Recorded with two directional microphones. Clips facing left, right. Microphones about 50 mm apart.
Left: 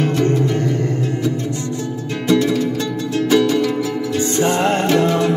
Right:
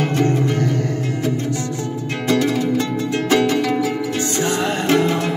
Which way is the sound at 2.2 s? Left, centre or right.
Right.